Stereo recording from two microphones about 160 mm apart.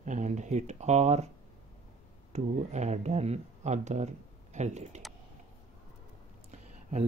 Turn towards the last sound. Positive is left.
turn(degrees=-45)  # may be behind; listen again after turning